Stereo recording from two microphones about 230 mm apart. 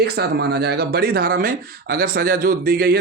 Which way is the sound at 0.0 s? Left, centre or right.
Right.